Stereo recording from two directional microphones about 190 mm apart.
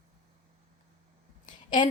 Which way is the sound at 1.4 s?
40° left (ahead or behind).